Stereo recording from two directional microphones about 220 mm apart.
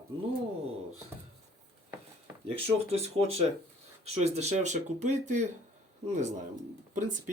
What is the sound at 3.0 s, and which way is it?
Speech, 30° right (ahead or behind).